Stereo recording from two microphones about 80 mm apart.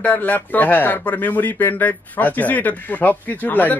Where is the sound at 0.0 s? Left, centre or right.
Left.